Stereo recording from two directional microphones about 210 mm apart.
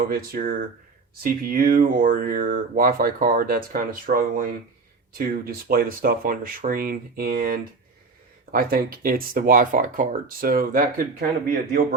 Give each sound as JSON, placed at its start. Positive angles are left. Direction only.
{"t": 0.1, "sound": "speech", "side_deg": -45}